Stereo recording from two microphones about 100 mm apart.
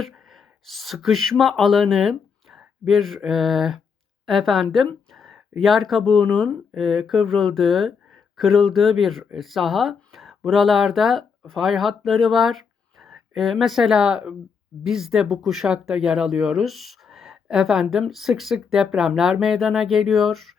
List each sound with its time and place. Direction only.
0.0 s speech: centre (ahead or behind)